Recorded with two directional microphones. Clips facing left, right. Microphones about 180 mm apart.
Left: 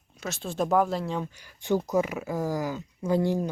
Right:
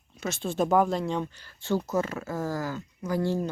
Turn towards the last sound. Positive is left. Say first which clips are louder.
# left 2 dB
turn(degrees=15)  # may be behind; listen again after turning